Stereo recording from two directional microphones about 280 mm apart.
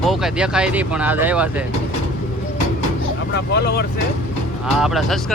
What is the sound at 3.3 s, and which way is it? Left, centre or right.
Speech, left.